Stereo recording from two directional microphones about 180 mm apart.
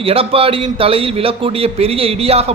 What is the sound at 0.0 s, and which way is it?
A man's voice, 30° right (ahead or behind).